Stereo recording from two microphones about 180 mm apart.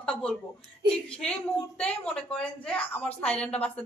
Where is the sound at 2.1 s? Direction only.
5° left (ahead or behind).